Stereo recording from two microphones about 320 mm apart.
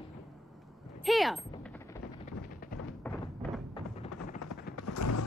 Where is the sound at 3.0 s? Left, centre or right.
Centre.